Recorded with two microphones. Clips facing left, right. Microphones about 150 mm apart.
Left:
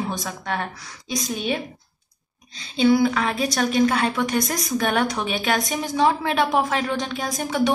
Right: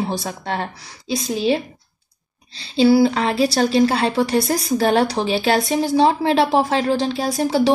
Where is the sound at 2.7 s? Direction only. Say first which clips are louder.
Right 4 dB; 30° right (ahead or behind).